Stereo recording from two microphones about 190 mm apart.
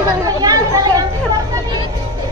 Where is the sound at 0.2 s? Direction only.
20° right (ahead or behind).